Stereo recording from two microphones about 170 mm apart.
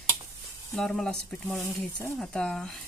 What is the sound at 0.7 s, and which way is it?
Speech, 5° left (ahead or behind).